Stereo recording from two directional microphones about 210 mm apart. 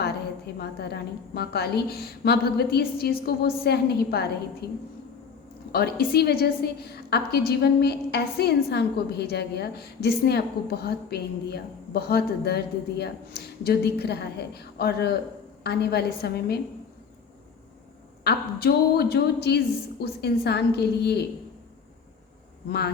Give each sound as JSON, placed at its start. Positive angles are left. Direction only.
{"t": 0.6, "sound": "a woman's voice", "side_deg": 50}
{"t": 5.7, "sound": "a woman's voice", "side_deg": 45}
{"t": 18.2, "sound": "a woman's voice", "side_deg": 50}